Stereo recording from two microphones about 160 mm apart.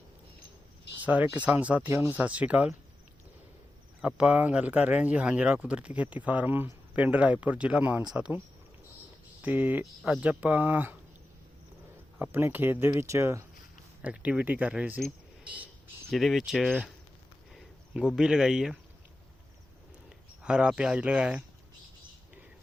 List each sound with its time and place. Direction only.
1.0 s speech: 10° right (ahead or behind)
4.0 s speech: 5° right (ahead or behind)
9.4 s speech: 10° right (ahead or behind)
12.2 s speech: 15° right (ahead or behind)
17.5 s a sound: centre (ahead or behind)
18.2 s speech: 5° right (ahead or behind)
20.1 s speech: 5° right (ahead or behind)